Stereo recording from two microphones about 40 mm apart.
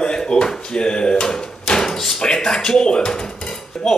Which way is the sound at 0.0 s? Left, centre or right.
Centre.